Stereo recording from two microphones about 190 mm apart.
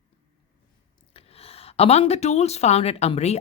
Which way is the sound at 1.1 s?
30° left (ahead or behind).